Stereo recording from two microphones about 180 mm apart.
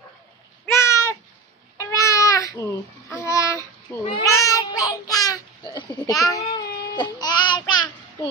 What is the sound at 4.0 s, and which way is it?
Speech, 35° left (ahead or behind).